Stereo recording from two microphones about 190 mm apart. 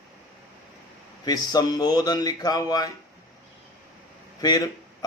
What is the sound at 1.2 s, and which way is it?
Speech, 20° left (ahead or behind).